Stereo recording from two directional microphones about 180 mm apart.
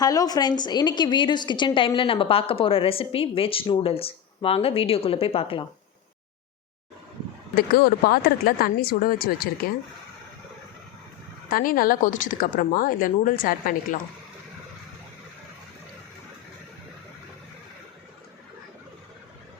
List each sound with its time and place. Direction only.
0.0 s a woman's voice: 20° left (ahead or behind)
7.5 s speech: 55° left (ahead or behind)
11.4 s speech: 50° left (ahead or behind)